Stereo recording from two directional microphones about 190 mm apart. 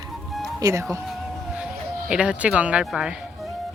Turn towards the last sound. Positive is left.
turn(degrees=-5)  # may be behind; listen again after turning